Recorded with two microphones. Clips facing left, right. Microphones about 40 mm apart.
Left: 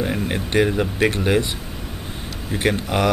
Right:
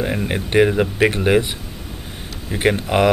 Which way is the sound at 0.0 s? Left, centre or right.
Centre.